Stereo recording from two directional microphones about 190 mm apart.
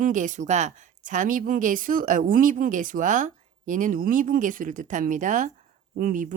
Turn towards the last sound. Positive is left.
turn(degrees=-45)  # may be behind; listen again after turning